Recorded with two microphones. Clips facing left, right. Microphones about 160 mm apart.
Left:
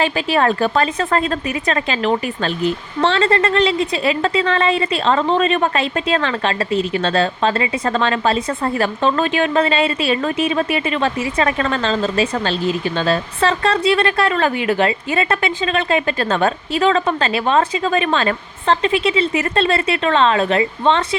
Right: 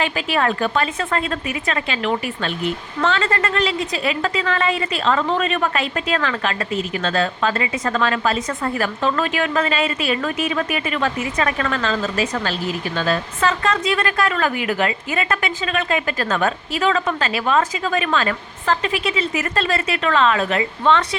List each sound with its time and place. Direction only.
0.0 s a woman's voice: 30° left (ahead or behind)